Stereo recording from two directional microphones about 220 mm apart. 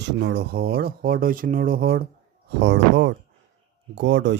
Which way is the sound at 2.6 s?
55° right (ahead or behind).